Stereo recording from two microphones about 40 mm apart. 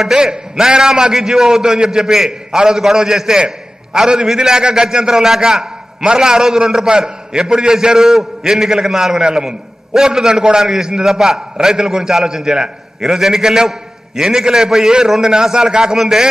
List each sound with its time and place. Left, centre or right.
0.0 s a man's voice: centre